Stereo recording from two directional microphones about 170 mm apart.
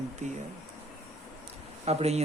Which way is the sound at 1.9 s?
40° right (ahead or behind).